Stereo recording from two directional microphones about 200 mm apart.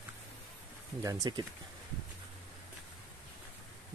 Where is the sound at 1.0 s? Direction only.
20° right (ahead or behind).